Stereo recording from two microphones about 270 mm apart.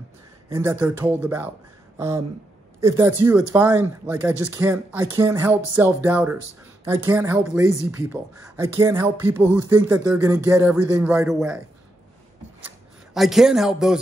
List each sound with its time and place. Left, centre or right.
0.5 s speech: centre
2.0 s a sound: centre
2.8 s speech: centre
13.1 s speech: centre